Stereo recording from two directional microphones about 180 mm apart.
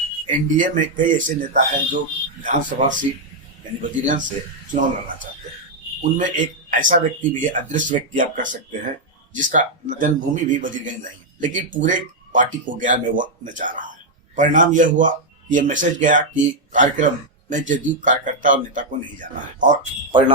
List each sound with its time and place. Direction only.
0.3 s a man's voice: 45° right (ahead or behind)
4.7 s a man's voice: 50° right (ahead or behind)